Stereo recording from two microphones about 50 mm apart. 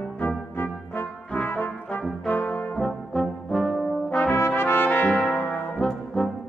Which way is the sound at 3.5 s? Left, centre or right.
Centre.